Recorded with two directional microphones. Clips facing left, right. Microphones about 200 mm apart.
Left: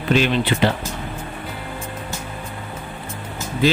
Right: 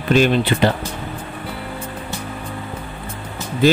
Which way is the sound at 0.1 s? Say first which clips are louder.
Right 3 dB; 45° right (ahead or behind).